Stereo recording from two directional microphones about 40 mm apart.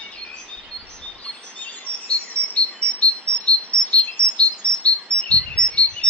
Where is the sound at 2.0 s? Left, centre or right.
Left.